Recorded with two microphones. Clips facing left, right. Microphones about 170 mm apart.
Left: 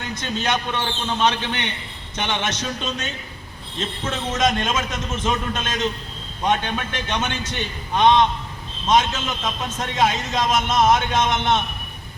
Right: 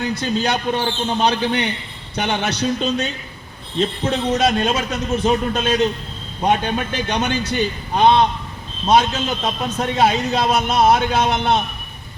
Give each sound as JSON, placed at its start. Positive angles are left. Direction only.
{"t": 0.1, "sound": "a man's voice", "side_deg": -35}
{"t": 7.1, "sound": "a man's voice", "side_deg": -35}